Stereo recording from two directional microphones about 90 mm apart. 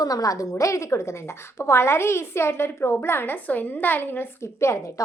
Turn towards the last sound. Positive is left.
turn(degrees=35)  # may be behind; listen again after turning